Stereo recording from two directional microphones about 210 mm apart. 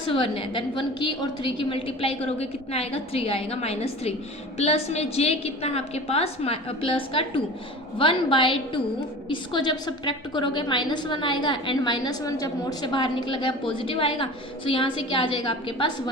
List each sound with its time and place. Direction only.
0.1 s a woman's voice: 25° left (ahead or behind)